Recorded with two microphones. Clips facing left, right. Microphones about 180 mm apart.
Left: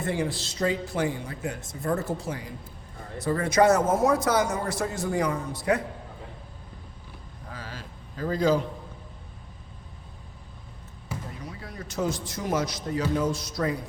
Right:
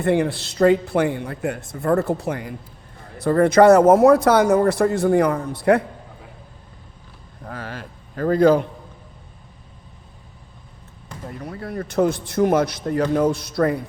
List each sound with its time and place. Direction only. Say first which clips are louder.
0.0 s speech: right 9 dB; 65° right (ahead or behind)
7.4 s a sound: right 8 dB; 60° right (ahead or behind)
11.3 s speech: right 9 dB; 55° right (ahead or behind)